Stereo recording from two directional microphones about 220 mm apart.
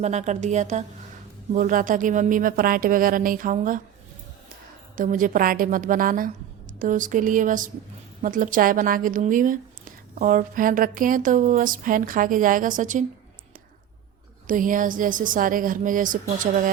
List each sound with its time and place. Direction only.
0.0 s speech: 30° right (ahead or behind)
4.9 s speech: 35° right (ahead or behind)
14.4 s speech: 35° right (ahead or behind)